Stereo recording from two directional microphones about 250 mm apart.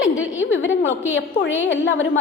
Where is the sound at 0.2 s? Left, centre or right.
Left.